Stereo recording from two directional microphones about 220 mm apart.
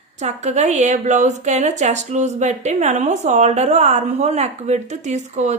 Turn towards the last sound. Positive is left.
turn(degrees=-30)  # may be behind; listen again after turning